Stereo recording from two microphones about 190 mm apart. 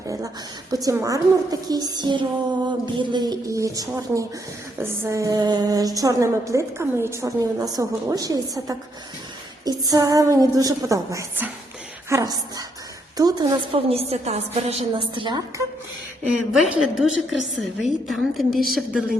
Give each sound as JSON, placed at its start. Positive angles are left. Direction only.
{"t": 0.7, "sound": "a woman's voice", "side_deg": -20}
{"t": 16.5, "sound": "a woman's voice", "side_deg": 0}